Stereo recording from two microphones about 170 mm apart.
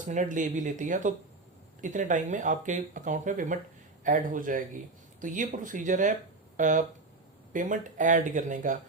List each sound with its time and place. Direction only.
0.0 s speech: 45° right (ahead or behind)